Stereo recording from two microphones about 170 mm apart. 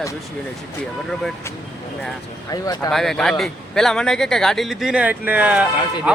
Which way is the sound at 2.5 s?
20° left (ahead or behind).